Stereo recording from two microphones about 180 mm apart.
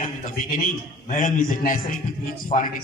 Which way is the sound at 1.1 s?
50° left (ahead or behind).